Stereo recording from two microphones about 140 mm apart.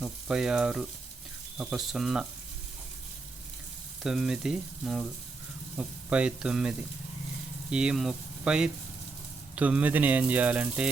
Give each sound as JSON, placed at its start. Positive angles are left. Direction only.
{"t": 0.0, "sound": "frying", "side_deg": -5}
{"t": 4.0, "sound": "frying", "side_deg": -5}
{"t": 5.7, "sound": "speech", "side_deg": -10}